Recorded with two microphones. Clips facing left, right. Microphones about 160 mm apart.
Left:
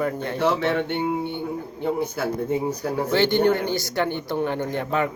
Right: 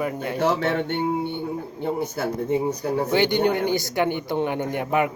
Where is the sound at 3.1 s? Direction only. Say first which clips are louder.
Left 2 dB; 15° right (ahead or behind).